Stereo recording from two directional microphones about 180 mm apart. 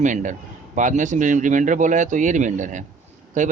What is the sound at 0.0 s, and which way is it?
Speech, 45° right (ahead or behind).